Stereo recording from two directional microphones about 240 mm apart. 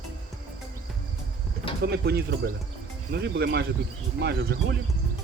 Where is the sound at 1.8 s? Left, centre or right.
Right.